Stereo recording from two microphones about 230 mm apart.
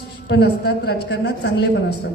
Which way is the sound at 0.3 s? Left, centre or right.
Left.